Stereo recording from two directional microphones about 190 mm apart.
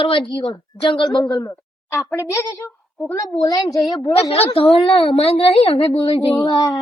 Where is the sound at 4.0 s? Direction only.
30° left (ahead or behind).